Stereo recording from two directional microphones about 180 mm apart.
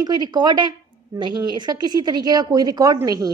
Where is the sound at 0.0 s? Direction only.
25° right (ahead or behind).